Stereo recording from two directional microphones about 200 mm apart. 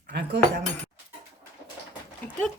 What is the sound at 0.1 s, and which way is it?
Chink, 55° right (ahead or behind).